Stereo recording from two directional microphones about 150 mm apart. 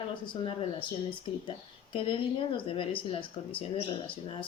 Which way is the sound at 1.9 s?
35° left (ahead or behind).